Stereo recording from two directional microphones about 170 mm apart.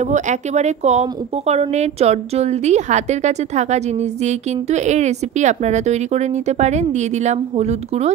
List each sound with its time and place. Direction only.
0.0 s speech: 45° right (ahead or behind)